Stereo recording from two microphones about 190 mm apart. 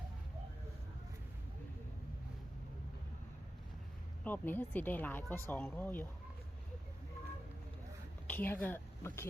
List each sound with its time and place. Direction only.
4.2 s speech: 10° left (ahead or behind)
8.3 s speech: 10° left (ahead or behind)